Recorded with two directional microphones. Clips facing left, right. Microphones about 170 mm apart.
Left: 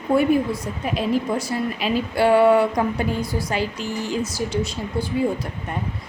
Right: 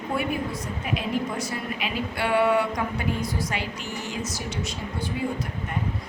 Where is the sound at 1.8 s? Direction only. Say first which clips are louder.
Left 10 dB; 35° left (ahead or behind).